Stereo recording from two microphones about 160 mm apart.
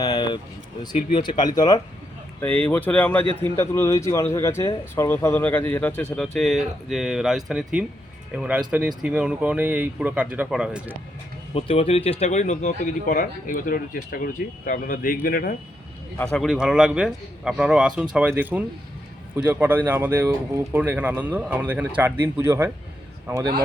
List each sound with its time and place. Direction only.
0.0 s a sound: 25° left (ahead or behind)
1.1 s speech: 30° left (ahead or behind)
2.4 s a man's voice: 10° left (ahead or behind); by 10.9 s 5° right (ahead or behind)
11.5 s speech: 35° left (ahead or behind); by 15.5 s 65° left (ahead or behind)
16.1 s a man's voice: 5° left (ahead or behind); by 23.6 s 20° right (ahead or behind)